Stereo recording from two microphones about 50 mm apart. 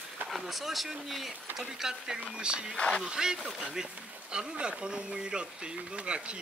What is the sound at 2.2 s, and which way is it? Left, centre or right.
Speech, right.